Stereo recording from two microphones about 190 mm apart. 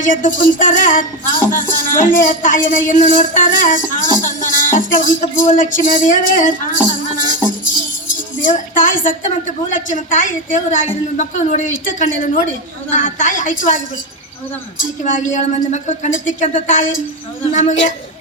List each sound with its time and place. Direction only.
0.0 s speech: 45° left (ahead or behind)
8.4 s a woman's voice: 45° left (ahead or behind)